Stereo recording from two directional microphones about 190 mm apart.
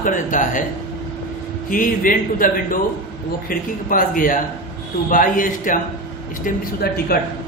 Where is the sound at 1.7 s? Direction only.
45° left (ahead or behind).